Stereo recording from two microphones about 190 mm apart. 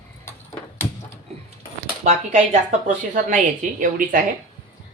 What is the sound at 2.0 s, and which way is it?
A woman's voice, 40° right (ahead or behind).